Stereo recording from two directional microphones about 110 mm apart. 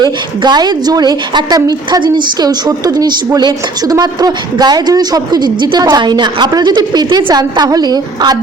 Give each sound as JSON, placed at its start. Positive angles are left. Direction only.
{"t": 0.0, "sound": "a woman's voice", "side_deg": -40}